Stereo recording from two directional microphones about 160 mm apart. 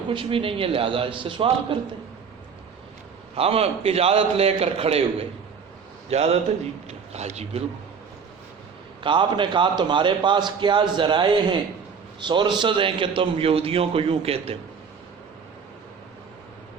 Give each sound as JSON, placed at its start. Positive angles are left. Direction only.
{"t": 0.1, "sound": "a man's voice", "side_deg": -35}
{"t": 3.3, "sound": "a man's voice", "side_deg": -40}
{"t": 6.1, "sound": "a man's voice", "side_deg": -40}
{"t": 9.0, "sound": "a man's voice", "side_deg": -30}